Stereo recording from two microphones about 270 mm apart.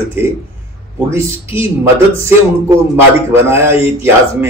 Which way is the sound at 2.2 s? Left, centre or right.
Centre.